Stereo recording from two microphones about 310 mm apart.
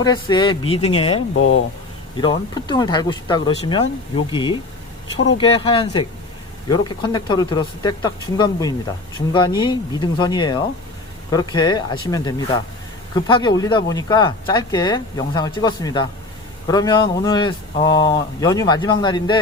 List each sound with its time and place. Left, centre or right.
0.0 s speech: centre